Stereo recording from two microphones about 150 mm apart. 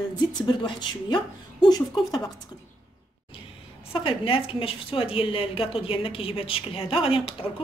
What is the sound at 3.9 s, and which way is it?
Speech, 35° left (ahead or behind).